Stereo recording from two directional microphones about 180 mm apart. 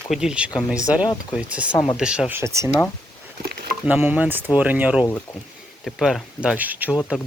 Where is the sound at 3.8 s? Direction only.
10° right (ahead or behind).